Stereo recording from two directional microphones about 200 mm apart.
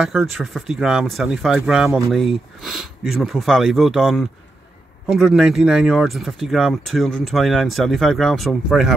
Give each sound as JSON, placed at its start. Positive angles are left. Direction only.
{"t": 0.0, "sound": "speech", "side_deg": 0}